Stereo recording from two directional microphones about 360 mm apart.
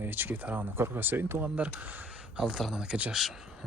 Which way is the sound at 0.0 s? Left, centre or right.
Centre.